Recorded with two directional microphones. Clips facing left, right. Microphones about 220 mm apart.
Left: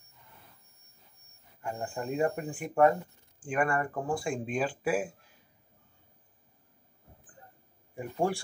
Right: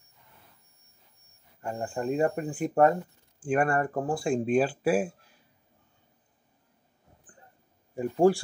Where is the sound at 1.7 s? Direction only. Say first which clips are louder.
Right 5 dB; 40° right (ahead or behind).